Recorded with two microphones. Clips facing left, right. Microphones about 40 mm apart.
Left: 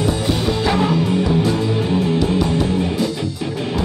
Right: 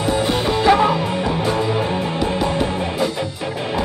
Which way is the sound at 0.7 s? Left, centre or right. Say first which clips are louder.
Right 5 dB; right.